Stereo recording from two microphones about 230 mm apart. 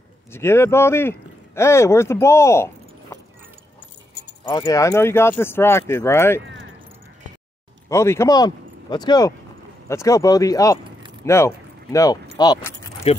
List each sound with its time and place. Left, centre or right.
0.3 s speech: centre
4.5 s speech: centre
6.4 s a sound: right
7.9 s speech: centre